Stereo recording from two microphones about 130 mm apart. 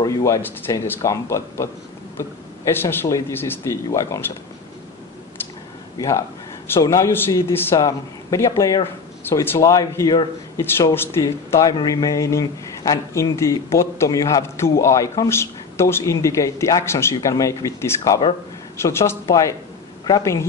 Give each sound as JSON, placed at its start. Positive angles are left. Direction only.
{"t": 0.0, "sound": "a man's voice", "side_deg": 25}
{"t": 5.9, "sound": "a man's voice", "side_deg": 25}